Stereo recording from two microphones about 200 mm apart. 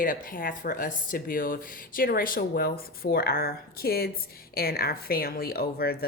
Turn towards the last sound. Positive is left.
turn(degrees=50)  # may be behind; listen again after turning